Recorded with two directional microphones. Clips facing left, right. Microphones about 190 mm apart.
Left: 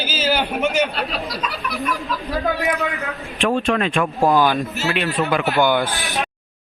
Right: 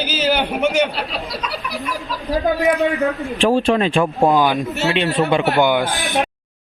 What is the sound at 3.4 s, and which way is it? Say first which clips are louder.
Speech: right 3 dB; 30° right (ahead or behind).